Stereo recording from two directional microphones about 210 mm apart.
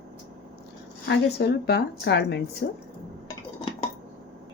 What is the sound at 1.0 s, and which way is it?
Speech, 55° left (ahead or behind).